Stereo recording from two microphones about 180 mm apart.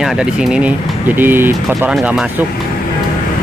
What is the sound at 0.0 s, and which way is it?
Speech, 5° right (ahead or behind).